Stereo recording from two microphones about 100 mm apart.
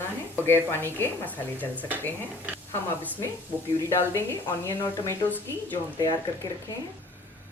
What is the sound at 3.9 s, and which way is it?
A woman's voice, 25° left (ahead or behind).